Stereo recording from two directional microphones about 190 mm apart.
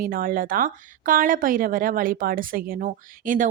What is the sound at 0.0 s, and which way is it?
Speech, 50° right (ahead or behind).